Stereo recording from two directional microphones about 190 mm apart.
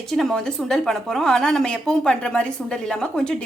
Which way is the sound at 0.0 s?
Centre (ahead or behind).